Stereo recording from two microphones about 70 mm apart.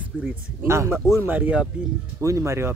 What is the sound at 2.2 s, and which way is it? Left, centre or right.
Speech, right.